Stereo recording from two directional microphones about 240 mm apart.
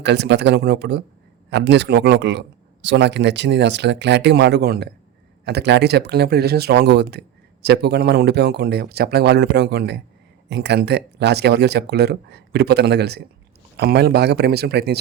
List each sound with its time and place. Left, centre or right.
0.0 s speech: right